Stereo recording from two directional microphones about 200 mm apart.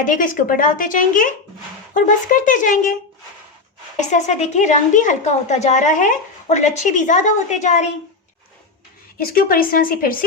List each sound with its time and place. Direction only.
0.0 s a woman's voice: 40° left (ahead or behind)
3.9 s a woman's voice: 35° left (ahead or behind)
9.1 s a woman's voice: 50° left (ahead or behind)